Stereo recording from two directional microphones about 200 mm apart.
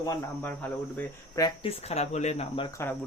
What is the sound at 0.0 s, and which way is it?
Speech, 10° left (ahead or behind).